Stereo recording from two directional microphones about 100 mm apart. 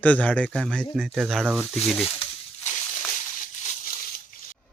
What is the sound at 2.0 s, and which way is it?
Speech, 70° left (ahead or behind).